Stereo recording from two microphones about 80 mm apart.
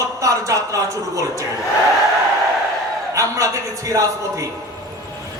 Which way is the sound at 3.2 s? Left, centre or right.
Right.